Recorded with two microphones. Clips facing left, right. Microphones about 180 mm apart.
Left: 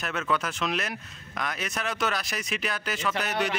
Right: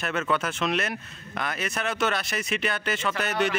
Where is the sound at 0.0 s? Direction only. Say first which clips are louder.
Right 2 dB; centre (ahead or behind).